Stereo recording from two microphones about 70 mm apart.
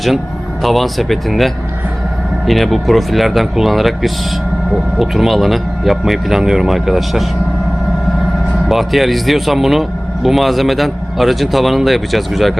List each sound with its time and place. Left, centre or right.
0.6 s speech: centre
8.7 s speech: centre